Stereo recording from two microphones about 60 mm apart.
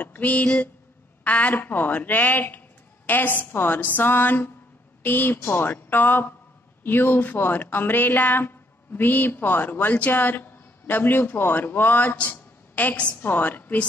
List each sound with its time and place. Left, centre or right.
0.0 s speech: left
12.2 s a sound: left
13.2 s speech: left